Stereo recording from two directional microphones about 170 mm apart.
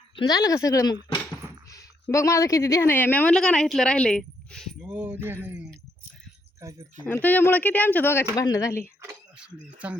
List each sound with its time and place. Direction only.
0.2 s speech: 20° left (ahead or behind); by 4.8 s centre (ahead or behind)
4.8 s music: 10° right (ahead or behind)
6.6 s speech: 20° right (ahead or behind)
7.0 s speech: 10° left (ahead or behind)
9.4 s music: 5° right (ahead or behind)